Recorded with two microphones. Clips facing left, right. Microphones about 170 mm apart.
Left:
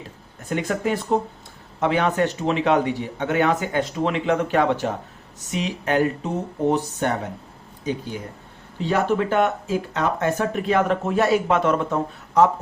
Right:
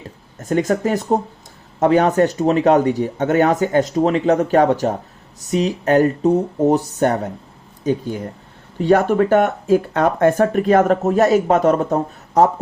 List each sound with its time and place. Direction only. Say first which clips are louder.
0.3 s speech: right 7 dB; 40° right (ahead or behind)
8.8 s speech: right 7 dB; 50° right (ahead or behind)